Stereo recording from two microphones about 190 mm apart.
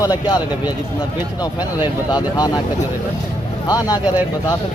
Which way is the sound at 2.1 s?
20° left (ahead or behind).